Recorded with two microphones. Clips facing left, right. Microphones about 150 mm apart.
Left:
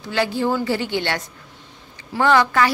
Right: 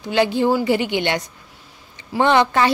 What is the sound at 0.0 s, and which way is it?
A woman's voice, 20° right (ahead or behind).